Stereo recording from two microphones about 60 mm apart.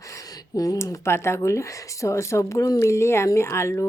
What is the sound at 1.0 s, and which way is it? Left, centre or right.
Speech, left.